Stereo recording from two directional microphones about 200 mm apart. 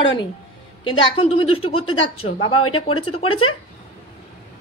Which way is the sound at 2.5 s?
90° left.